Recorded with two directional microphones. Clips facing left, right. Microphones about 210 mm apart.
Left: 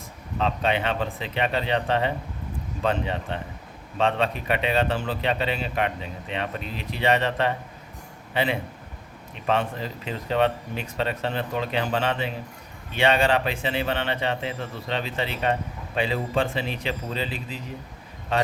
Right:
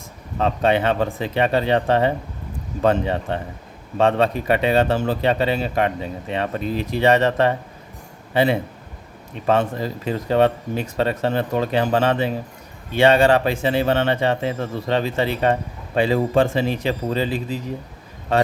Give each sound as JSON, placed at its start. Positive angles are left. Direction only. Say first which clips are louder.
{"t": 0.3, "sound": "a man's voice", "louder": "right 6 dB", "side_deg": -50}